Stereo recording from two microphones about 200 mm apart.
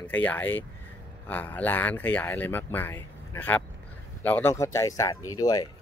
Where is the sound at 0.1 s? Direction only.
10° left (ahead or behind).